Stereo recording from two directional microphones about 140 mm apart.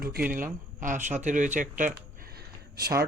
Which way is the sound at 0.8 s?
65° right (ahead or behind).